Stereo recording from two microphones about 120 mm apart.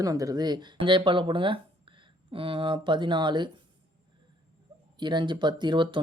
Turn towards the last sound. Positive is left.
turn(degrees=-40)  # may be behind; listen again after turning